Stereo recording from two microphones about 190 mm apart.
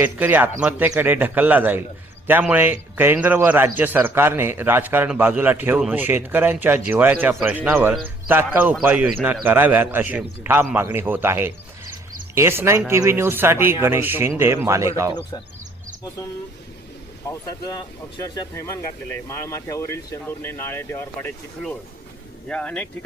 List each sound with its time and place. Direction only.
0.0 s speech: 10° right (ahead or behind)
17.2 s speech: 20° left (ahead or behind)